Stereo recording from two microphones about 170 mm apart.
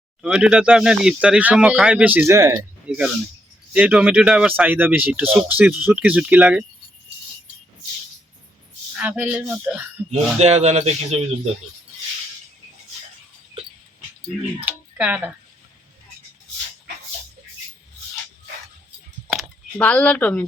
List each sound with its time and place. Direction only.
0.2 s speech: 5° right (ahead or behind)
2.6 s speech: 5° right (ahead or behind)
9.0 s speech: 10° right (ahead or behind)
10.3 s speech: 40° right (ahead or behind)
14.6 s a sound: 10° right (ahead or behind)
19.8 s speech: 10° left (ahead or behind)